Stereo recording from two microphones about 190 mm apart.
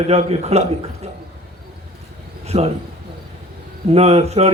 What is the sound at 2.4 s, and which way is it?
Speech, 35° right (ahead or behind).